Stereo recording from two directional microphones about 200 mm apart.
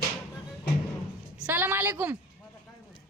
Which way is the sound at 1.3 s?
10° right (ahead or behind).